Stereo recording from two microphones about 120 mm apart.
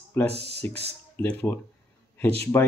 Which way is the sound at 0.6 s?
20° left (ahead or behind).